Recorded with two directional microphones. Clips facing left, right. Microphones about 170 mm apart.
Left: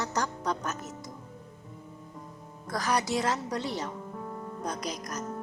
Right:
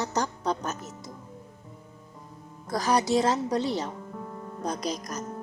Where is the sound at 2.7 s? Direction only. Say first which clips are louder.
Right 5 dB; 30° right (ahead or behind).